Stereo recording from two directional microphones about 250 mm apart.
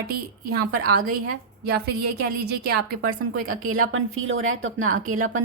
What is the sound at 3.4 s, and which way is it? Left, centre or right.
A woman's voice, right.